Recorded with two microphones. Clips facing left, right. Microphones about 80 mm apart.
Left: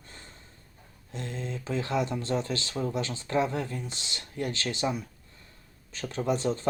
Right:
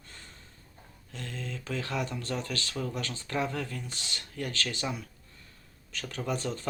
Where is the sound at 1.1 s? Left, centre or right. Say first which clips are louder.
Left 4 dB; left.